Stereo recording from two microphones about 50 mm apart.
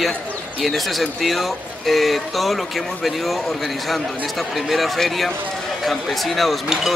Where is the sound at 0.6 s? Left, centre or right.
Centre.